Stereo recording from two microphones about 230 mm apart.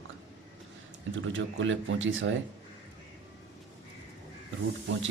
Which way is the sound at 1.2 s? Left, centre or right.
Right.